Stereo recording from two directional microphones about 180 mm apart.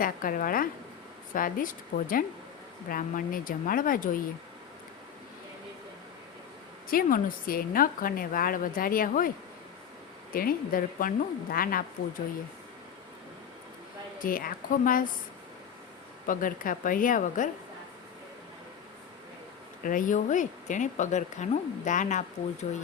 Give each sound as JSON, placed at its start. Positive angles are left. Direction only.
{"t": 0.0, "sound": "a woman's voice", "side_deg": 50}
{"t": 6.9, "sound": "a woman's voice", "side_deg": 55}
{"t": 10.3, "sound": "a woman's voice", "side_deg": 55}
{"t": 14.2, "sound": "a woman's voice", "side_deg": 50}
{"t": 16.2, "sound": "a woman's voice", "side_deg": 50}
{"t": 19.8, "sound": "a woman's voice", "side_deg": 50}